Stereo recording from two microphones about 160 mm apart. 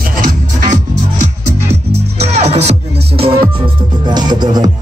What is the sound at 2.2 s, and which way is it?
Music, 40° right (ahead or behind).